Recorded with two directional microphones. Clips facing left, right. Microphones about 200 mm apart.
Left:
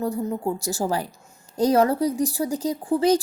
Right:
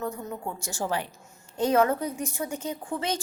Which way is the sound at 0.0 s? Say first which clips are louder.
Left 8 dB; 35° left (ahead or behind).